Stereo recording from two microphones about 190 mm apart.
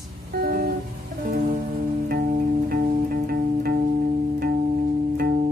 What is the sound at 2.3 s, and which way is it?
Music, 50° right (ahead or behind).